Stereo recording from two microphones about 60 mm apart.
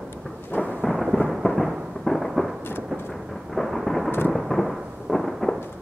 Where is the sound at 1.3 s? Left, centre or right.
Centre.